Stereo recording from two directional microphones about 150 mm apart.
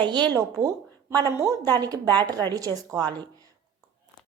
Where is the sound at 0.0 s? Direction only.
30° right (ahead or behind).